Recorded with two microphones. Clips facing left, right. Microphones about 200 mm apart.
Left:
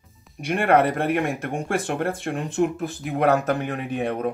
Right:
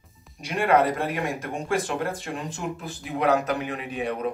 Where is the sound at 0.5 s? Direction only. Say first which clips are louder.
Left 2 dB; 60° left (ahead or behind).